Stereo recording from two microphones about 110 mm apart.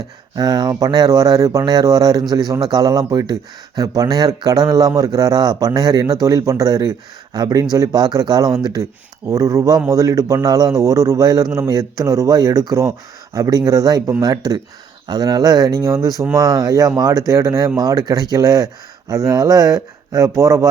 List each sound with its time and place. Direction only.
0.3 s speech: 35° right (ahead or behind)